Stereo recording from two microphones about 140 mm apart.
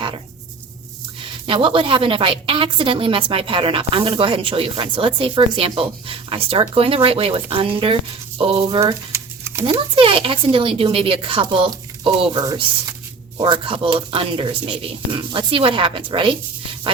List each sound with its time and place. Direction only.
1.2 s a woman's voice: 40° right (ahead or behind)
8.8 s a sound: 20° right (ahead or behind)
9.9 s a woman's voice: 40° right (ahead or behind)